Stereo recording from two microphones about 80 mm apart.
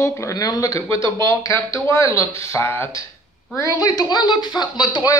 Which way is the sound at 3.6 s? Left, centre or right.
Left.